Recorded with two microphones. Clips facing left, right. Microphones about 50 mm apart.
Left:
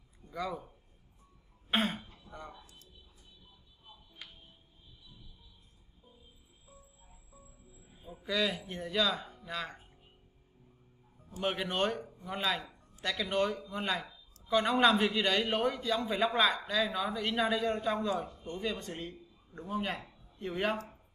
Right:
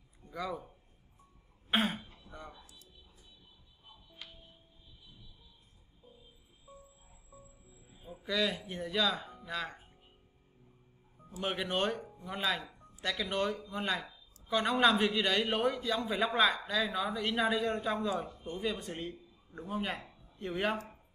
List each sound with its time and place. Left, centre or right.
0.3 s speech: centre
1.7 s throat clearing: centre
2.6 s a sound: left
8.0 s a man's voice: centre
11.4 s a man's voice: centre